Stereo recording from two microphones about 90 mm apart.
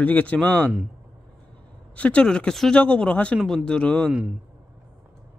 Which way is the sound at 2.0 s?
15° left (ahead or behind).